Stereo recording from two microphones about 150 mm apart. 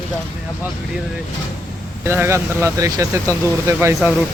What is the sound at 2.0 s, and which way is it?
Speech, 15° right (ahead or behind).